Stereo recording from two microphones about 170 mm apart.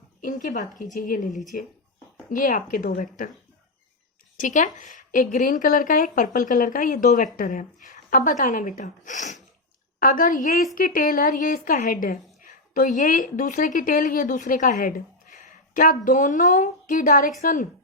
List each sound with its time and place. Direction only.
0.2 s a woman's voice: 50° left (ahead or behind)
1.3 s speech: centre (ahead or behind)
2.3 s a woman's voice: 50° left (ahead or behind)
4.4 s a woman's voice: 50° left (ahead or behind)